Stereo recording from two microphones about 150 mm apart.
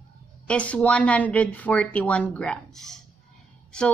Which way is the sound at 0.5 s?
5° left (ahead or behind).